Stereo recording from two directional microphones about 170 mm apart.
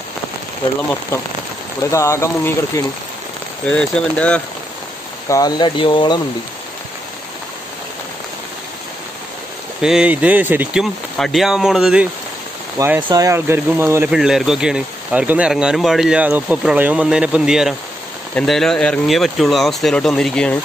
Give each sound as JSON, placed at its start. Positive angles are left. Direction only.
{"t": 1.1, "sound": "speech", "side_deg": 15}
{"t": 3.6, "sound": "speech", "side_deg": 5}
{"t": 5.3, "sound": "speech", "side_deg": 25}
{"t": 9.8, "sound": "speech", "side_deg": -5}
{"t": 12.7, "sound": "speech", "side_deg": -15}
{"t": 14.1, "sound": "speech", "side_deg": -5}